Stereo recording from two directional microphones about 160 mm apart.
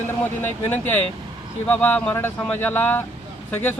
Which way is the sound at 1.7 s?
10° left (ahead or behind).